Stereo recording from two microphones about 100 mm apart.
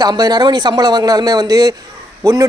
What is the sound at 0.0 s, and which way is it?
Speech, 40° right (ahead or behind).